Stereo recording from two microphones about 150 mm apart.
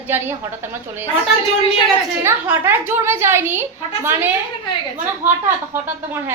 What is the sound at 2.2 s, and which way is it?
A woman's voice, 15° right (ahead or behind).